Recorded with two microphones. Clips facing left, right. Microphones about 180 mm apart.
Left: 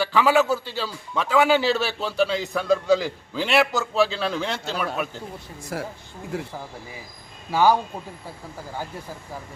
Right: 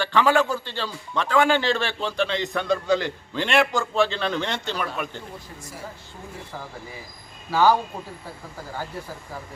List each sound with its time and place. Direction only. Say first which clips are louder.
0.0 s a man's voice: left 1 dB; 5° left (ahead or behind)
5.7 s speech: left 9 dB; 90° left
7.5 s speech: even; 15° left (ahead or behind)